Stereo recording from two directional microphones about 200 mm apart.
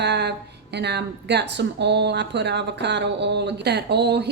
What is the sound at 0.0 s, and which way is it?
A woman's voice, 60° right (ahead or behind).